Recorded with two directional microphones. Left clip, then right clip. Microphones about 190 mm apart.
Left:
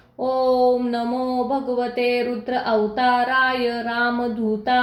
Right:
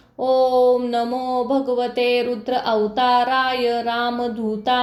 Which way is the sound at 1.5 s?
30° right (ahead or behind).